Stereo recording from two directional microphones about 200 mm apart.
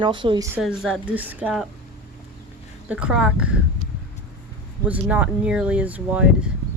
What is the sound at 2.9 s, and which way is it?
Speech, 5° right (ahead or behind).